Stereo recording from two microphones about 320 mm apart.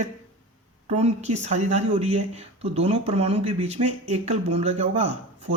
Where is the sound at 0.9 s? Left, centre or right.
Centre.